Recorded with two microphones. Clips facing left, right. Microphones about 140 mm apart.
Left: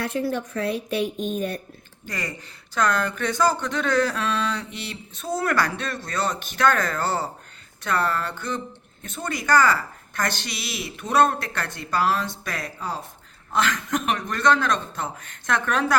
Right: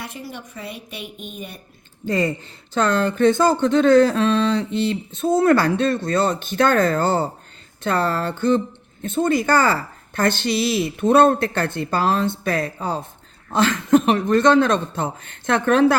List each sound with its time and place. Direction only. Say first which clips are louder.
0.1 s a woman's voice: left 9 dB; 90° left
1.0 s speech: left 9 dB; 35° left (ahead or behind)
1.4 s a woman's voice: left 8 dB; 90° left
2.0 s speech: right 11 dB; 25° right (ahead or behind)